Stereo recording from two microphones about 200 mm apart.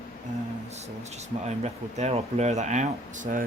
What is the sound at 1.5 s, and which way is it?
Speech, 35° right (ahead or behind).